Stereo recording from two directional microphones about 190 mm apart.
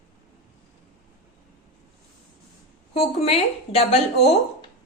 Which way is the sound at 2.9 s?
30° left (ahead or behind).